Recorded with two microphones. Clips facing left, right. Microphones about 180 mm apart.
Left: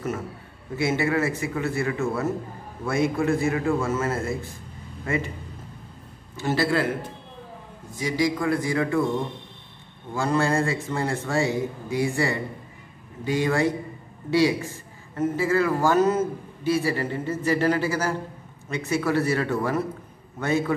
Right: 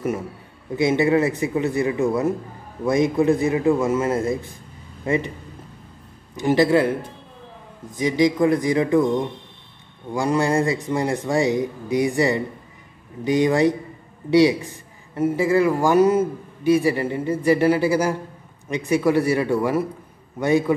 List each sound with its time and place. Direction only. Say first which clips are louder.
0.7 s a man's voice: right 6 dB; 20° right (ahead or behind)
6.3 s a man's voice: right 7 dB; 15° right (ahead or behind)
7.9 s speech: right 5 dB; 20° right (ahead or behind)
10.1 s a man's voice: right 3 dB; 15° right (ahead or behind)